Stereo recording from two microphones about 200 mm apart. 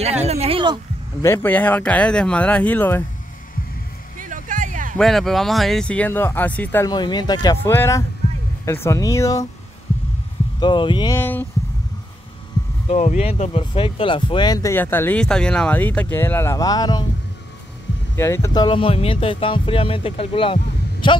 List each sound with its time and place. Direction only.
0.0 s speech: 30° right (ahead or behind)
1.2 s speech: 10° left (ahead or behind)
4.2 s music: 40° right (ahead or behind)
4.9 s speech: centre (ahead or behind)
10.6 s speech: 25° left (ahead or behind)
11.1 s speech: 10° left (ahead or behind)
12.8 s speech: 35° left (ahead or behind)
18.1 s speech: 15° left (ahead or behind)